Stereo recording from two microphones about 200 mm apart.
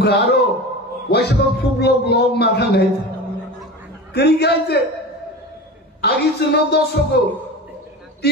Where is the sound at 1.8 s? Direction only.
55° left (ahead or behind).